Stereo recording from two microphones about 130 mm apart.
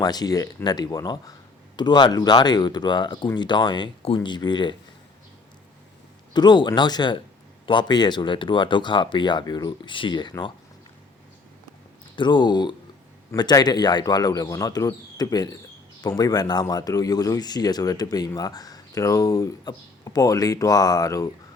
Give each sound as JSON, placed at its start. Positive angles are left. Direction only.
{"t": 0.0, "sound": "speech", "side_deg": 30}
{"t": 6.3, "sound": "speech", "side_deg": 35}
{"t": 12.1, "sound": "speech", "side_deg": 35}